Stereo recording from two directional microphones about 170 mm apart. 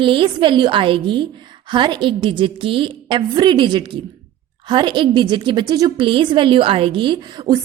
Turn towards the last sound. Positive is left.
turn(degrees=-30)  # may be behind; listen again after turning